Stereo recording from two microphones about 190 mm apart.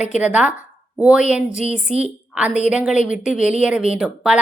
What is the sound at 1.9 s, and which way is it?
Speech, 35° right (ahead or behind).